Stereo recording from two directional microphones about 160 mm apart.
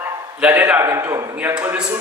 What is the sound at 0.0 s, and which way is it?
A man's voice, 10° right (ahead or behind).